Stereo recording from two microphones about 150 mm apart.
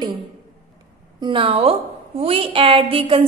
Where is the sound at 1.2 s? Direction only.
35° right (ahead or behind).